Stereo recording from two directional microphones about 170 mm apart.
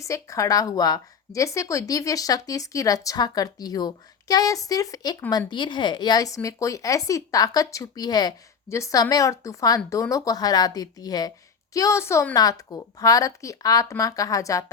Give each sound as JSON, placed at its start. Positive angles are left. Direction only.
{"t": 0.0, "sound": "speech", "side_deg": 20}